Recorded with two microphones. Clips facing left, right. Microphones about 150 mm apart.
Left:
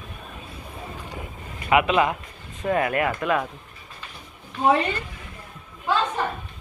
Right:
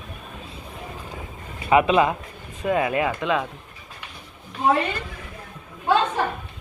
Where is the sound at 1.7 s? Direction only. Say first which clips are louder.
Right 2 dB; 30° right (ahead or behind).